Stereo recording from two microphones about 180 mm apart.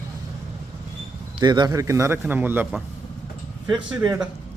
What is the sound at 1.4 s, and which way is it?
A man's voice, 25° right (ahead or behind).